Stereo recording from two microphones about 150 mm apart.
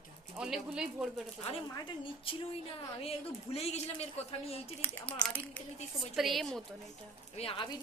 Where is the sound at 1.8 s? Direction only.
35° left (ahead or behind).